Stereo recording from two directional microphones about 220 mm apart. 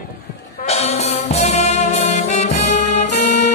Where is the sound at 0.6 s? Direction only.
30° left (ahead or behind).